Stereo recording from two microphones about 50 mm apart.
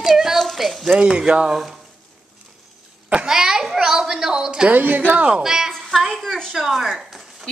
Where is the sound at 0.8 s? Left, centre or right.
Centre.